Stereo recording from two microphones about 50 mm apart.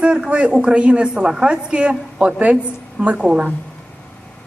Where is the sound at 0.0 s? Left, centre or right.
Centre.